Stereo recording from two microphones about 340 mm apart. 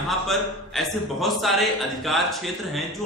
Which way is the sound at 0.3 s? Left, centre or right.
Centre.